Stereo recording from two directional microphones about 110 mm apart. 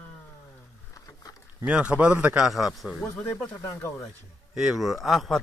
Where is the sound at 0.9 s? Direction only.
30° left (ahead or behind).